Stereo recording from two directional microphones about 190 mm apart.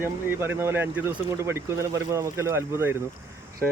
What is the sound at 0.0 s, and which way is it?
Speech, 10° right (ahead or behind).